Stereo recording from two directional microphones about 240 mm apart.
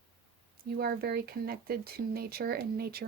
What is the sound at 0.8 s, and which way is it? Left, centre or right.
Speech, right.